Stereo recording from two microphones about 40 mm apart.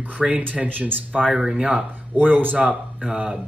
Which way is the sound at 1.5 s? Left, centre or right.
Right.